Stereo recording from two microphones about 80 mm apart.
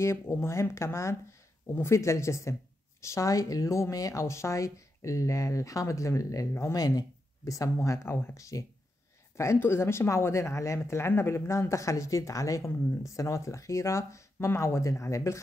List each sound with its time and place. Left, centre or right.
0.0 s speech: left
9.4 s speech: left